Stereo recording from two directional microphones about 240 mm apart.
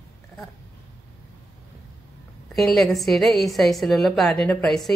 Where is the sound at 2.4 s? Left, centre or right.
Centre.